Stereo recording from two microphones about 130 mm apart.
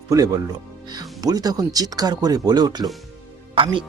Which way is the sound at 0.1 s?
25° right (ahead or behind).